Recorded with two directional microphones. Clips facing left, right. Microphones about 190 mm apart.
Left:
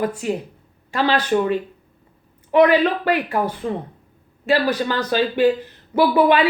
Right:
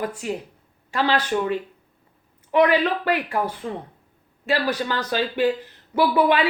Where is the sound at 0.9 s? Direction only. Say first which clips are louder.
Left 3 dB; 25° left (ahead or behind).